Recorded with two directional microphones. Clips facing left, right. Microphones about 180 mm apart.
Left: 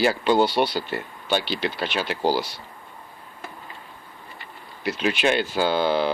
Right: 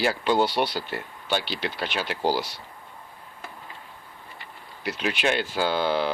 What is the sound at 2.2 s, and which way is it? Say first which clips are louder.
Speech: left 2 dB; 10° left (ahead or behind).